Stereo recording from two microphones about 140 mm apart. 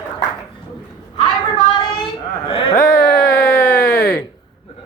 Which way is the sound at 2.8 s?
20° left (ahead or behind).